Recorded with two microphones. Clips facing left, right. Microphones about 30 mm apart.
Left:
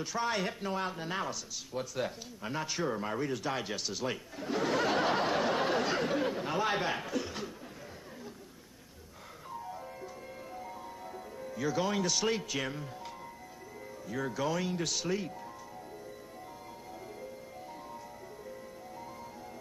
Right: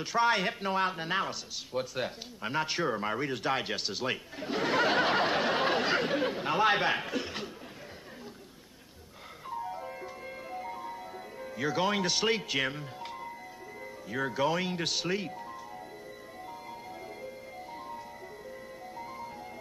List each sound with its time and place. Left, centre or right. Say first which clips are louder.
0.0 s speech: right 6 dB; right
9.5 s music: right 5 dB; right
14.0 s speech: right 4 dB; right